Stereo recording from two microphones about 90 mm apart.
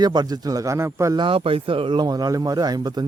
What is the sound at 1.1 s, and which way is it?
Speech, 80° right.